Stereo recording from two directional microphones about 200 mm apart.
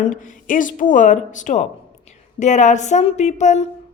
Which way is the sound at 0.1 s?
40° left (ahead or behind).